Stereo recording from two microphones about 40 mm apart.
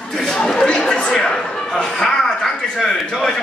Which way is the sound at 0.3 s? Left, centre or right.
Centre.